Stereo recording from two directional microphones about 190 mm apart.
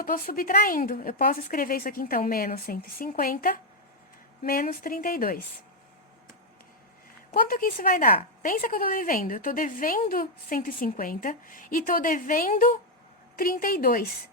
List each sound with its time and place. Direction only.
0.0 s a woman's voice: 50° left (ahead or behind)
7.3 s a woman's voice: 45° left (ahead or behind)